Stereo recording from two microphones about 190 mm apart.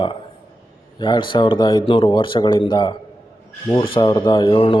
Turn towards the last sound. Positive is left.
turn(degrees=25)  # may be behind; listen again after turning